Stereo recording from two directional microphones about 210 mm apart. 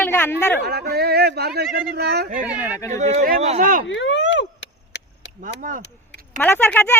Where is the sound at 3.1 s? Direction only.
35° right (ahead or behind).